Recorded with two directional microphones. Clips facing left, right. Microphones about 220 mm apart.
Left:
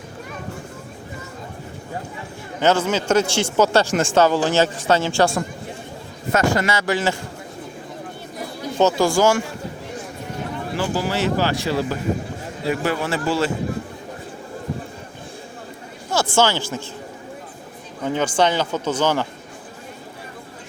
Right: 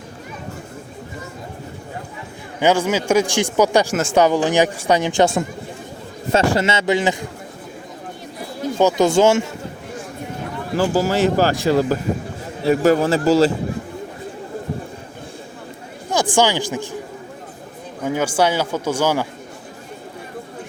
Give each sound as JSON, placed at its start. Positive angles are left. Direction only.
{"t": 2.6, "sound": "a man's voice", "side_deg": -10}
{"t": 8.8, "sound": "a man's voice", "side_deg": -15}
{"t": 10.8, "sound": "a man's voice", "side_deg": -40}
{"t": 16.3, "sound": "speech", "side_deg": -15}
{"t": 18.0, "sound": "speech", "side_deg": -10}